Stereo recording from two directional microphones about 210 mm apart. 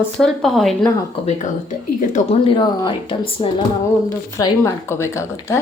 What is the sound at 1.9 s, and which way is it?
Speech, 35° left (ahead or behind).